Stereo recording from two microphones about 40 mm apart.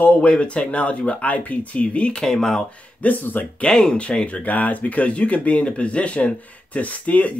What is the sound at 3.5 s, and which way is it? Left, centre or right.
Speech, left.